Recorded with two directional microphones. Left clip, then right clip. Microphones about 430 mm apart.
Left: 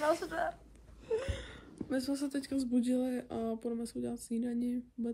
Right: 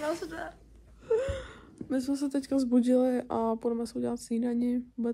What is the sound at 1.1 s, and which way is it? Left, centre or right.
Speech, centre.